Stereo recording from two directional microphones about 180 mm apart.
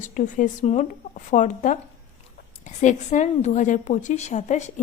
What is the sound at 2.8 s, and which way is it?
A woman's voice, 40° left (ahead or behind).